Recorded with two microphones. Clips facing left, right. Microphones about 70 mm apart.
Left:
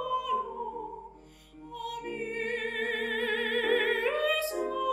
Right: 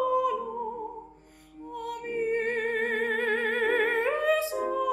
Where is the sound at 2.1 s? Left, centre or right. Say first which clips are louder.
Right 8 dB; right.